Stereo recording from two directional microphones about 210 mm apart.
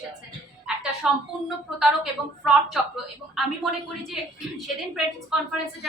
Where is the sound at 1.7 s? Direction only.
Centre (ahead or behind).